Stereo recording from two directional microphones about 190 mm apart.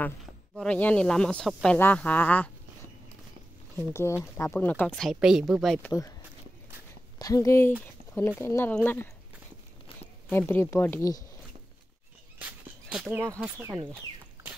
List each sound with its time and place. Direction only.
0.6 s speech: 5° left (ahead or behind)
3.7 s speech: 15° left (ahead or behind)
7.2 s speech: 20° left (ahead or behind)
10.3 s speech: 10° left (ahead or behind)
12.8 s a sound: 5° right (ahead or behind)
13.3 s speech: 10° right (ahead or behind)